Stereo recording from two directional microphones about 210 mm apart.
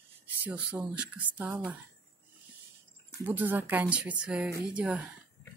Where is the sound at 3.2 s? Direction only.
10° right (ahead or behind).